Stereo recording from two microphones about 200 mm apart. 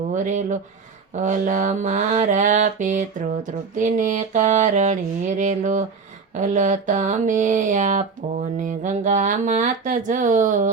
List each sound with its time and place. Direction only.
0.1 s speech: 40° right (ahead or behind)
1.1 s mantra: 40° right (ahead or behind)